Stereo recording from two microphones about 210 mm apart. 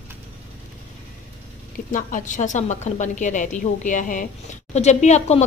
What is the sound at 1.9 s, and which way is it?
A woman's voice, 40° left (ahead or behind).